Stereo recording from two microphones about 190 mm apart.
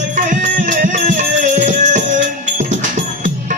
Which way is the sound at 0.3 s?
40° right (ahead or behind).